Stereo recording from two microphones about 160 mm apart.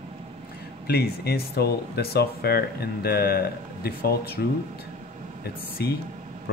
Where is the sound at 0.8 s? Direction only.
80° left.